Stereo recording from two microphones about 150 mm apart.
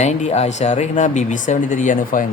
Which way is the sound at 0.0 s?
50° left (ahead or behind).